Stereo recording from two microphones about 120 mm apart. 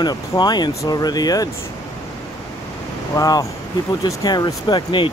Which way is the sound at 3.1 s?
30° left (ahead or behind).